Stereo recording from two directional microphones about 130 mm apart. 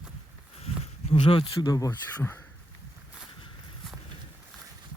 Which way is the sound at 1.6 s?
30° left (ahead or behind).